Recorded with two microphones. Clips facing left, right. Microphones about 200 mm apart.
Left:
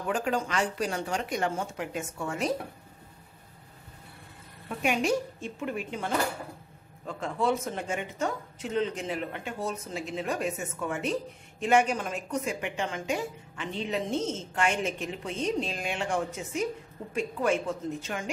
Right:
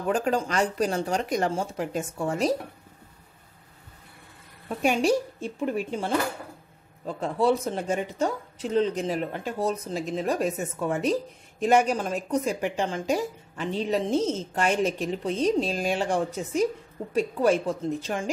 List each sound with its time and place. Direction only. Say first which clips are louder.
0.1 s a woman's voice: right 4 dB; 40° right (ahead or behind)
4.6 s a woman's voice: right 4 dB; 30° right (ahead or behind)